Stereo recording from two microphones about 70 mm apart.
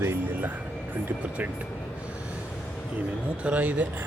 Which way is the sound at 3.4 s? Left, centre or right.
Centre.